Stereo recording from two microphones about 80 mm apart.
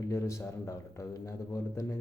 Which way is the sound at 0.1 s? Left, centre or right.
Left.